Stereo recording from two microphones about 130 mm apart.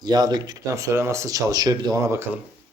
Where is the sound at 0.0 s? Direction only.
30° right (ahead or behind).